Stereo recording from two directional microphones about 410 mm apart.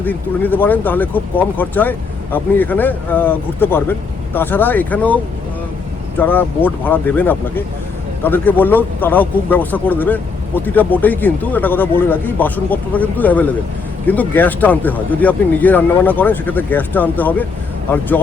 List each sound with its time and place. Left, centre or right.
0.0 s speech: centre